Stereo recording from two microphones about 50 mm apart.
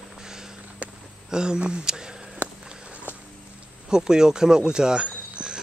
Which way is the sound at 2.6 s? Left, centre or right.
Centre.